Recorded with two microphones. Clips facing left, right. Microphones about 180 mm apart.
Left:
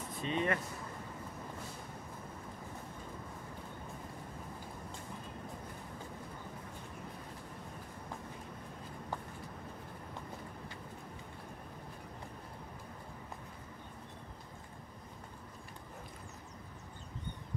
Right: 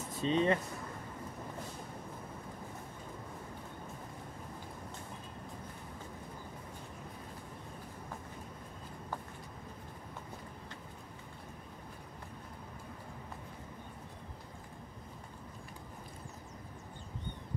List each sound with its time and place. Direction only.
0.2 s speech: 30° right (ahead or behind)